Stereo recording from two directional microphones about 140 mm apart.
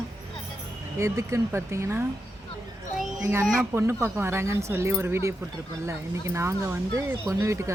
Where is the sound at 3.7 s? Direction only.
15° right (ahead or behind).